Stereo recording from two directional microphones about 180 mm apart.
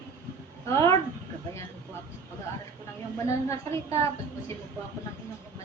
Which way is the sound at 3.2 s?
15° left (ahead or behind).